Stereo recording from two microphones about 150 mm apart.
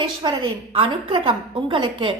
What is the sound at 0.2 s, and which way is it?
Speech, 35° right (ahead or behind).